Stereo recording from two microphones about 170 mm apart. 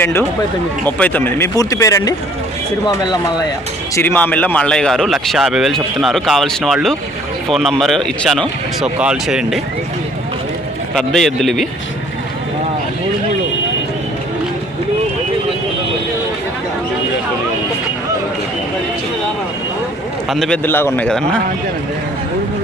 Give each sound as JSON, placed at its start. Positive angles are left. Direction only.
{"t": 0.0, "sound": "speech", "side_deg": 15}
{"t": 3.9, "sound": "speech", "side_deg": 10}
{"t": 10.9, "sound": "speech", "side_deg": 0}
{"t": 20.3, "sound": "speech", "side_deg": 0}
{"t": 20.7, "sound": "speech", "side_deg": 10}